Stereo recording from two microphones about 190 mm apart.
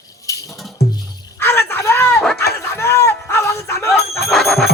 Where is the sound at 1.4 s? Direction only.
10° left (ahead or behind).